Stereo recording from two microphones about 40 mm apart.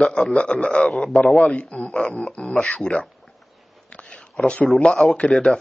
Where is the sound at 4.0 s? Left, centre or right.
Left.